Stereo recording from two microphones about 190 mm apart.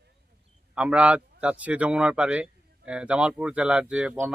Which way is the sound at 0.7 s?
5° right (ahead or behind).